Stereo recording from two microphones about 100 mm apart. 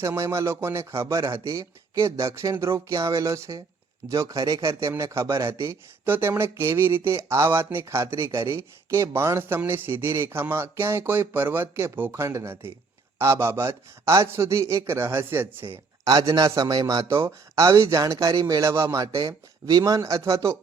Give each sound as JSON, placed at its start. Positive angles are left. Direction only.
{"t": 0.2, "sound": "speech", "side_deg": -30}
{"t": 16.0, "sound": "a man's voice", "side_deg": -40}
{"t": 17.1, "sound": "a man's voice", "side_deg": -30}